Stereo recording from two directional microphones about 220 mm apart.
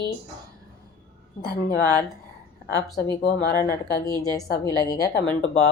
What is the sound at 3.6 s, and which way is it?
A woman's voice, 15° left (ahead or behind).